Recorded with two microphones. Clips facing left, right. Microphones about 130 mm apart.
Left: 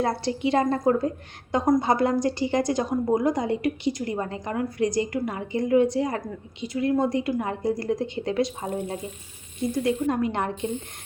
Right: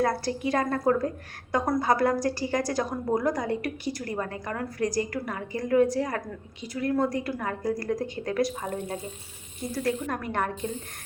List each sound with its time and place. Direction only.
0.0 s a woman's voice: 25° left (ahead or behind)